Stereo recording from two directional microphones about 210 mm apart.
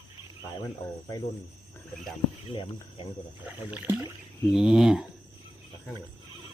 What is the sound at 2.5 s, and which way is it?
Speech, 25° left (ahead or behind).